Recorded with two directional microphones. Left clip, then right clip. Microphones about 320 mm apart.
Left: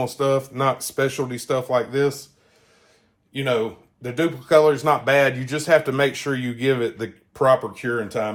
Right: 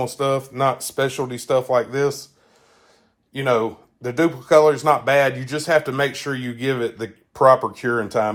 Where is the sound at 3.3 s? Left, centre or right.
Right.